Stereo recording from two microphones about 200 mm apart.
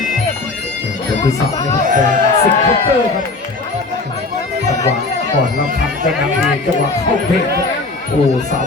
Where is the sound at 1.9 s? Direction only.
40° right (ahead or behind).